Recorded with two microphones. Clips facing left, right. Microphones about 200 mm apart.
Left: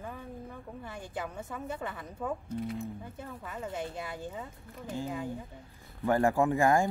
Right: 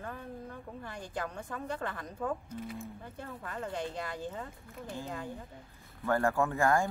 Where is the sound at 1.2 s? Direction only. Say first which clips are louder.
Even; 5° left (ahead or behind).